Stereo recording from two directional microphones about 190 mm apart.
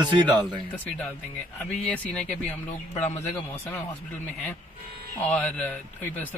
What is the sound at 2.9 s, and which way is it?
Speech, 35° left (ahead or behind).